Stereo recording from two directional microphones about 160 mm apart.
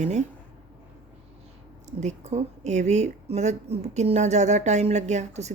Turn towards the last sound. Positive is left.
turn(degrees=-45)  # may be behind; listen again after turning